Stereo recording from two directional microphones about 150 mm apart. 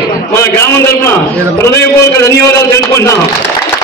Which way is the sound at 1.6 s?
20° left (ahead or behind).